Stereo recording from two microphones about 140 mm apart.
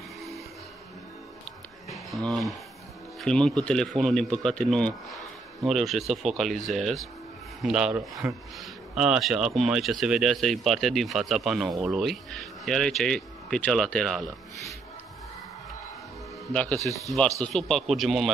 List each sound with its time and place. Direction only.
1.9 s speech: centre (ahead or behind)
16.7 s speech: 25° right (ahead or behind)
17.4 s speech: 5° left (ahead or behind)